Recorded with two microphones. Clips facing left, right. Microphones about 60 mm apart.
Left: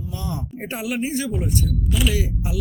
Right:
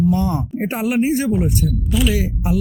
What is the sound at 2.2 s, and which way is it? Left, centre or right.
Speech, right.